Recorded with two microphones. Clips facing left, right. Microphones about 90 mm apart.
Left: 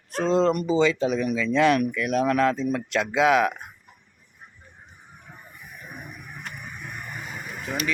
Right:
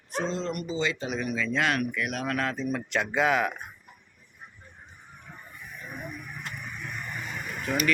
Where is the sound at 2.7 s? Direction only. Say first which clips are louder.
Left 4 dB; 90° left.